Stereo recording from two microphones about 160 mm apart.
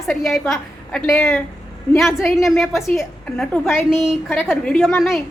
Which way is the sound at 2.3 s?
Centre (ahead or behind).